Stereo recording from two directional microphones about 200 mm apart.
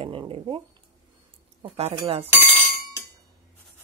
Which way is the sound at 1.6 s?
25° right (ahead or behind).